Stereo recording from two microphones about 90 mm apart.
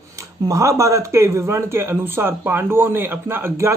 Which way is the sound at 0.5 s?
35° right (ahead or behind).